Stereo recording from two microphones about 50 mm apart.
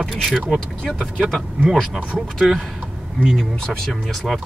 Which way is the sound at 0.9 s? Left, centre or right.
Centre.